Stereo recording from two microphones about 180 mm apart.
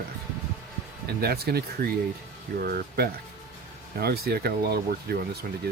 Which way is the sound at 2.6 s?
55° right (ahead or behind).